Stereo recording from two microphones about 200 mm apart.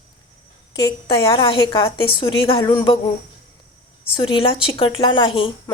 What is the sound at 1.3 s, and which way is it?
A woman's voice, 25° left (ahead or behind).